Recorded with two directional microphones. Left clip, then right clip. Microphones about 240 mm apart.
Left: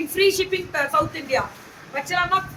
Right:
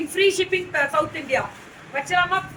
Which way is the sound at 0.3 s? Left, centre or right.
Centre.